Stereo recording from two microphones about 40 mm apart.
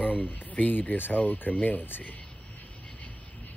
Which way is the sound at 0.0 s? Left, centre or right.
Left.